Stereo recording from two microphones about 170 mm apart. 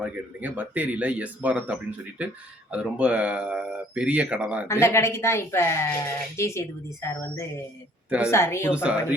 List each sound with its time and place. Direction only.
0.0 s speech: 10° right (ahead or behind)
4.7 s speech: 15° left (ahead or behind)
8.7 s speech: 5° right (ahead or behind)